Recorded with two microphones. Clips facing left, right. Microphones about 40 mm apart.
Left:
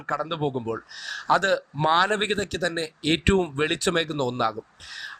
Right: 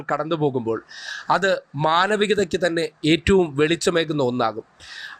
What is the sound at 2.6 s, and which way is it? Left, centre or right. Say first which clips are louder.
Speech: right 6 dB; right.